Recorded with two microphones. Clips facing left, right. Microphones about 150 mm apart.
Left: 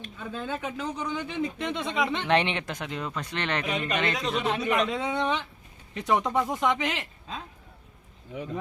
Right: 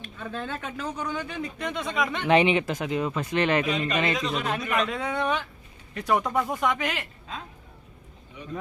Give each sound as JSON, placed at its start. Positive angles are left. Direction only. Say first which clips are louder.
{"t": 0.2, "sound": "speech", "louder": "even", "side_deg": 10}
{"t": 2.2, "sound": "a man's voice", "louder": "right 9 dB", "side_deg": -5}
{"t": 4.4, "sound": "speech", "louder": "left 4 dB", "side_deg": 20}